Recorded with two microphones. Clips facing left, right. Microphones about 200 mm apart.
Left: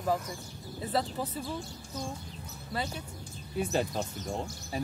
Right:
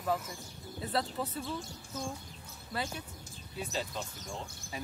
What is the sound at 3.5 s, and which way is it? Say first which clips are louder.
Speech: left 8 dB; 50° left (ahead or behind).